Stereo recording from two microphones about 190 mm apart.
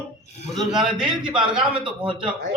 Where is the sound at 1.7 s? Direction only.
25° right (ahead or behind).